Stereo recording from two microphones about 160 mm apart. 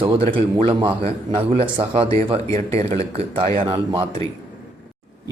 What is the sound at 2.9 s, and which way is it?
Speech, 40° right (ahead or behind).